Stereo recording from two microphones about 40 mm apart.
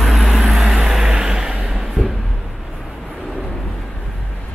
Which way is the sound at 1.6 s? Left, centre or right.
Centre.